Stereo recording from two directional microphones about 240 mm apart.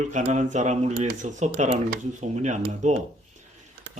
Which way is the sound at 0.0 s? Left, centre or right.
Right.